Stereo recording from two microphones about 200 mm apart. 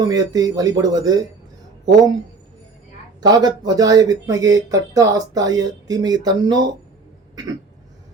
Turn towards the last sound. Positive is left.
turn(degrees=-20)  # may be behind; listen again after turning